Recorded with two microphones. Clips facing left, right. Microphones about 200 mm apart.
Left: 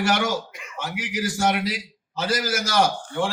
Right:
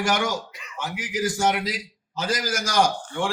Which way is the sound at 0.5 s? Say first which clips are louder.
Left 4 dB; 50° left (ahead or behind).